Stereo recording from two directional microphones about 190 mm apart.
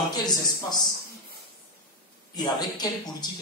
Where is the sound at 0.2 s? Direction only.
20° left (ahead or behind).